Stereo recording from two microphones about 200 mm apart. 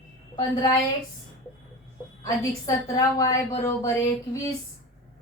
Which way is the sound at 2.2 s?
15° left (ahead or behind).